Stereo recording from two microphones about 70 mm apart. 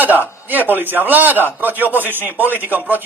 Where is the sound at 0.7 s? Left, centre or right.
Right.